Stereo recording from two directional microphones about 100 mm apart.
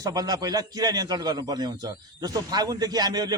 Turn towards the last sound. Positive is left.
turn(degrees=-40)  # may be behind; listen again after turning